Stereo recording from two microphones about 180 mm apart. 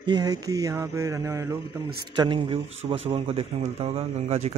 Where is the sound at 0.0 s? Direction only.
25° right (ahead or behind).